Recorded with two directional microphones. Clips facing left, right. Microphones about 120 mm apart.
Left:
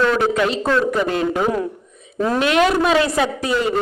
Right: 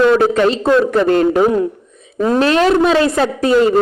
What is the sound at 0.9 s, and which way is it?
Speech, 45° right (ahead or behind).